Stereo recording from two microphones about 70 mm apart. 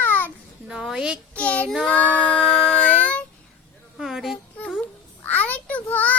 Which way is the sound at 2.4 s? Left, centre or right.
Centre.